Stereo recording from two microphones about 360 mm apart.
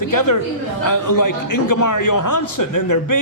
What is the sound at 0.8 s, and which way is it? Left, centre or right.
A man's voice, left.